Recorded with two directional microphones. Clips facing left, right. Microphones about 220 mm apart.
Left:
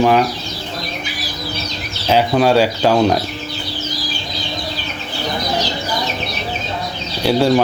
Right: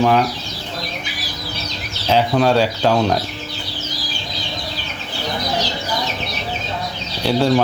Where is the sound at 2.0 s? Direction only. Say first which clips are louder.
Left 2 dB; 10° left (ahead or behind).